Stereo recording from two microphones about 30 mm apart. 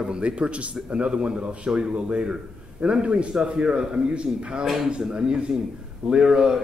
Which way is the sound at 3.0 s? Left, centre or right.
Right.